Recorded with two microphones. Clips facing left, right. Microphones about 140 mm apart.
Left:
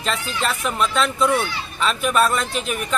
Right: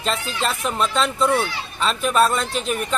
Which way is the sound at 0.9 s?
Centre (ahead or behind).